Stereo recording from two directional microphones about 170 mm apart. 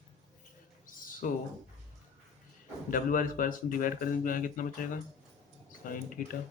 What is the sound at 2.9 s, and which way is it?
Speech, 55° left (ahead or behind).